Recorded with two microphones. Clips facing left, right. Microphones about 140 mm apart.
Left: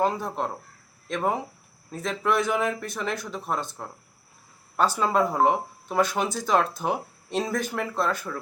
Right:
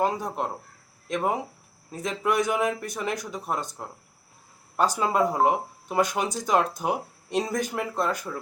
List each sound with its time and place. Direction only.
0.0 s speech: 20° right (ahead or behind)
1.9 s speech: 15° right (ahead or behind)